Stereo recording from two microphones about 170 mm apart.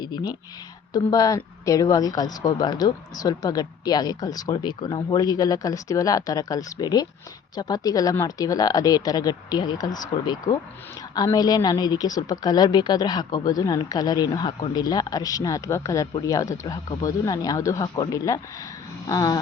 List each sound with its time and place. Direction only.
0.0 s a woman's voice: 25° left (ahead or behind)